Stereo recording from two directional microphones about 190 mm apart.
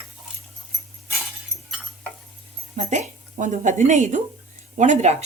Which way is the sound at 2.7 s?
40° right (ahead or behind).